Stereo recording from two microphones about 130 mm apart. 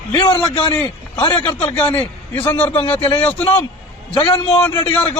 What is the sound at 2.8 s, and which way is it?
Speech, 45° left (ahead or behind).